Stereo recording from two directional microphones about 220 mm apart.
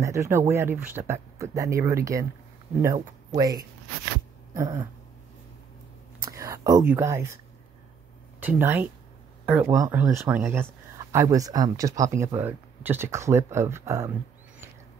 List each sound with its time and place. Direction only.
0.0 s speech: 15° right (ahead or behind)
3.3 s speech: 15° right (ahead or behind)
6.2 s speech: 15° right (ahead or behind)
8.4 s speech: 10° right (ahead or behind)